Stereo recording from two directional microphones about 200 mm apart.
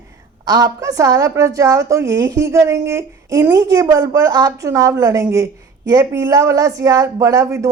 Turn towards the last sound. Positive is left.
turn(degrees=-15)  # may be behind; listen again after turning